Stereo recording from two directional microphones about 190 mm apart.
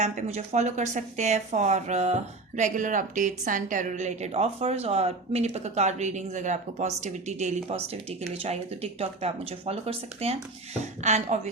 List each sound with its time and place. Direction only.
0.0 s a woman's voice: 35° right (ahead or behind)